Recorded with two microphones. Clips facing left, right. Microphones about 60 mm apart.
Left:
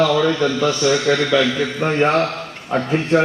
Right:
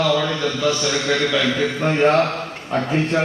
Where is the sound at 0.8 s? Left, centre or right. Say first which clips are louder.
Left 4 dB; centre.